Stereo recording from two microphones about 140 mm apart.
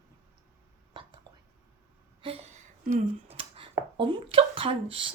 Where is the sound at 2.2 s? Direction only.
40° right (ahead or behind).